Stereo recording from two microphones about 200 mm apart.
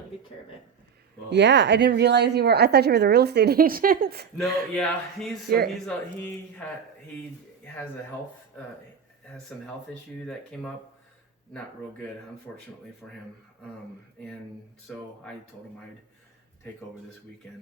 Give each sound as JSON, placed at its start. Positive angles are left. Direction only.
{"t": 1.3, "sound": "a woman's voice", "side_deg": -60}
{"t": 4.4, "sound": "speech", "side_deg": 0}
{"t": 10.5, "sound": "speech", "side_deg": 5}
{"t": 14.8, "sound": "speech", "side_deg": 5}